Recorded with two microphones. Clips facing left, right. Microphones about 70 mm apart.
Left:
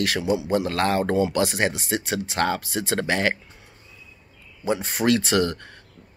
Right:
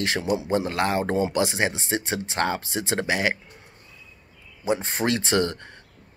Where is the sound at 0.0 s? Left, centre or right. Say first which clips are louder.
Left 2 dB; right.